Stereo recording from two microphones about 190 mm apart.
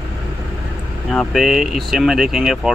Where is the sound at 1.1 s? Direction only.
Centre (ahead or behind).